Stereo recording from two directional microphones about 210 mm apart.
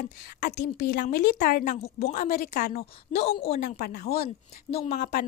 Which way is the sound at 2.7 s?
30° left (ahead or behind).